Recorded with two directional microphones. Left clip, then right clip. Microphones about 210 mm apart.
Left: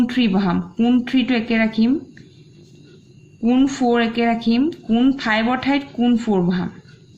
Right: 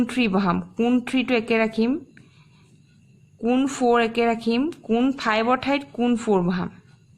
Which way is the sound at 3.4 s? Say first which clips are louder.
Left 3 dB; 50° right (ahead or behind).